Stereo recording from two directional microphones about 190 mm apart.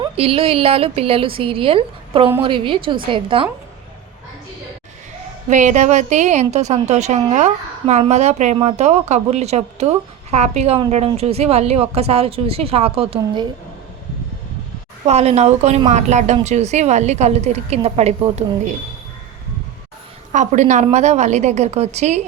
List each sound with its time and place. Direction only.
0.0 s a woman's voice: 30° right (ahead or behind)
5.5 s a woman's voice: 40° right (ahead or behind)
15.0 s a woman's voice: 35° right (ahead or behind)
20.3 s a woman's voice: 40° right (ahead or behind)